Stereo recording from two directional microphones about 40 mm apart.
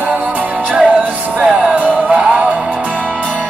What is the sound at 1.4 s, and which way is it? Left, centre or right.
Music, right.